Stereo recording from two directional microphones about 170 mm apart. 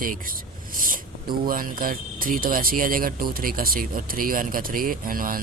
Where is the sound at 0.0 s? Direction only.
55° right (ahead or behind).